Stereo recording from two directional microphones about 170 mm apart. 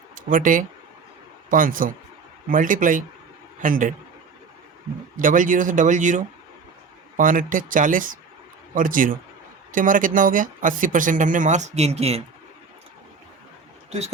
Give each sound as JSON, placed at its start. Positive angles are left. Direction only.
{"t": 0.3, "sound": "speech", "side_deg": -50}
{"t": 5.2, "sound": "speech", "side_deg": -50}